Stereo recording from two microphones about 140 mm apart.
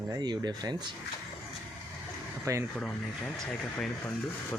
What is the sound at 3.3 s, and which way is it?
Speech, 5° left (ahead or behind).